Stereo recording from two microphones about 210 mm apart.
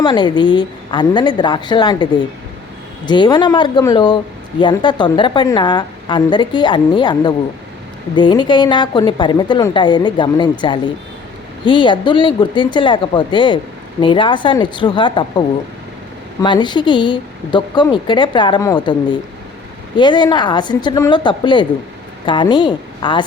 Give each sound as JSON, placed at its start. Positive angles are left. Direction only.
{"t": 0.0, "sound": "speech", "side_deg": 20}
{"t": 3.1, "sound": "speech", "side_deg": 20}
{"t": 11.6, "sound": "speech", "side_deg": 25}